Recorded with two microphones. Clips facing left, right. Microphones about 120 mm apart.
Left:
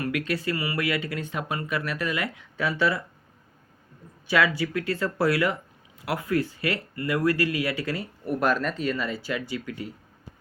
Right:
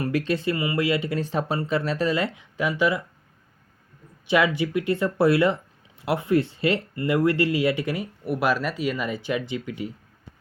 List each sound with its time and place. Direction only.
0.0 s speech: 30° right (ahead or behind)
2.6 s speech: 15° right (ahead or behind)
4.3 s speech: 20° right (ahead or behind)